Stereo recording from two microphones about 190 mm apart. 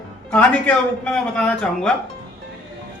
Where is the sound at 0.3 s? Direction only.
10° left (ahead or behind).